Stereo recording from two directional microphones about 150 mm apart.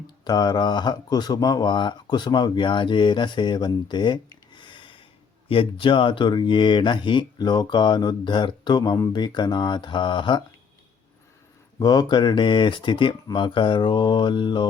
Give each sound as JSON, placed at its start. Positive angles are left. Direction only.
{"t": 0.3, "sound": "speech", "side_deg": 25}
{"t": 11.8, "sound": "speech", "side_deg": 30}